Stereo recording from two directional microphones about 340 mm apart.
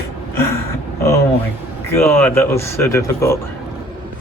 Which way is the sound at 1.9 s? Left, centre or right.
Centre.